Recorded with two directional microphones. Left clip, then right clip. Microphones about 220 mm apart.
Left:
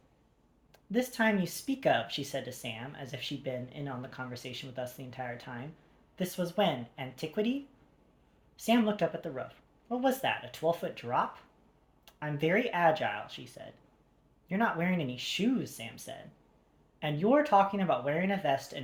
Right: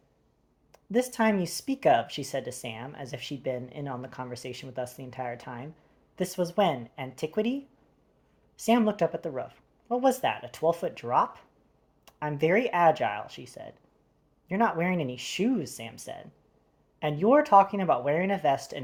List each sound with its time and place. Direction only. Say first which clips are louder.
0.7 s speech: right 5 dB; 45° right (ahead or behind)
8.5 s speech: right 4 dB; 45° right (ahead or behind)